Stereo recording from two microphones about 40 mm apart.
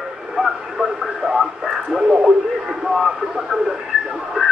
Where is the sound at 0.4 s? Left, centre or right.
Centre.